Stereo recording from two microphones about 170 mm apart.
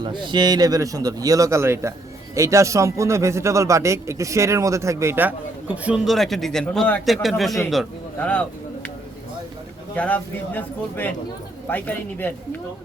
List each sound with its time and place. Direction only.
0.0 s speech: 25° right (ahead or behind); by 8.9 s 5° left (ahead or behind)
9.9 s speech: 10° left (ahead or behind)